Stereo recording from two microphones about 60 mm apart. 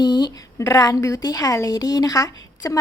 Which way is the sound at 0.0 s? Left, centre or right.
Left.